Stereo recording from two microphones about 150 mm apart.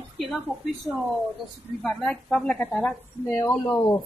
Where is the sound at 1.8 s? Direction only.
5° left (ahead or behind).